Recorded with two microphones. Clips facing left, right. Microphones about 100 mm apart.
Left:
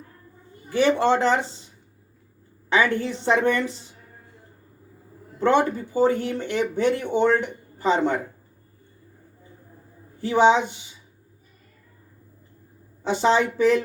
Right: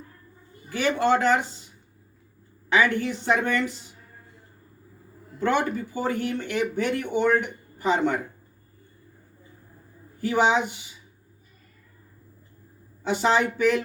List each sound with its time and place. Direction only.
0.7 s a woman's voice: 30° left (ahead or behind)
2.6 s a woman's voice: 30° left (ahead or behind)
5.4 s speech: 30° left (ahead or behind)
10.2 s speech: 30° left (ahead or behind)
13.0 s a woman's voice: 30° left (ahead or behind)